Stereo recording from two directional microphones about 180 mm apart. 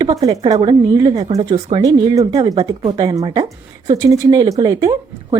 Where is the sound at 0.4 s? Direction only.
25° right (ahead or behind).